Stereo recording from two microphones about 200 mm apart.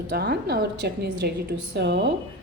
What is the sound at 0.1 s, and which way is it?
A woman's voice, 55° right (ahead or behind).